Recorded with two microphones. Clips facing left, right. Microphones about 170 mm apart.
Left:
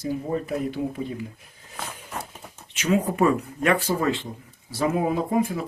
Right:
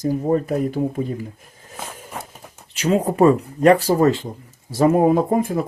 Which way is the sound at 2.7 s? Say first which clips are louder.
Right 4 dB; 35° right (ahead or behind).